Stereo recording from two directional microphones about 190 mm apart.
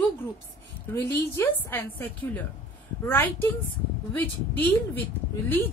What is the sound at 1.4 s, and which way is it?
A woman's voice, 10° left (ahead or behind).